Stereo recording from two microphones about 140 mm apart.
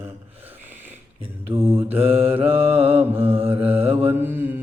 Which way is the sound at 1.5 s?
15° right (ahead or behind).